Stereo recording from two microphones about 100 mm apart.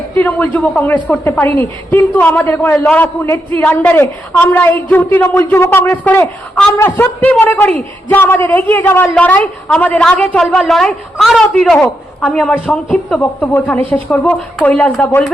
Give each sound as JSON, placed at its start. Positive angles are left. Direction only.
{"t": 0.2, "sound": "a woman's voice", "side_deg": 15}
{"t": 10.3, "sound": "a woman's voice", "side_deg": 5}